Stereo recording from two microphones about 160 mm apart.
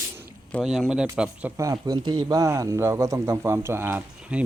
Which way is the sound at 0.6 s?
5° right (ahead or behind).